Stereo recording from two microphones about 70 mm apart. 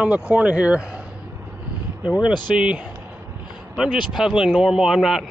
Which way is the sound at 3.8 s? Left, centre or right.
Centre.